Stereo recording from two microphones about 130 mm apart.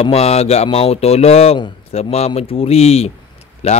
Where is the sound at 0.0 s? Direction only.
50° left (ahead or behind).